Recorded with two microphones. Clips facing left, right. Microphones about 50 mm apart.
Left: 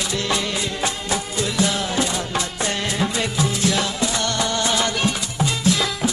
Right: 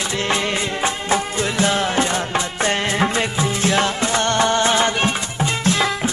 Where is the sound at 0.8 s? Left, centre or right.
Right.